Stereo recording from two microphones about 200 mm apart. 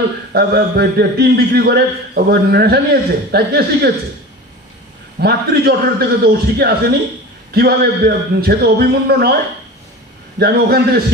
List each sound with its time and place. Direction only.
0.3 s a man's voice: 50° right (ahead or behind)
5.2 s a man's voice: 50° right (ahead or behind)
10.4 s a man's voice: 50° right (ahead or behind)